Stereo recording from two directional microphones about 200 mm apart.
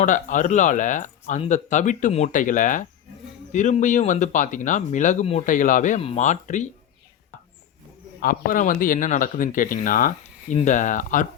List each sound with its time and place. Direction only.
0.0 s speech: 40° left (ahead or behind)
8.2 s speech: 45° left (ahead or behind)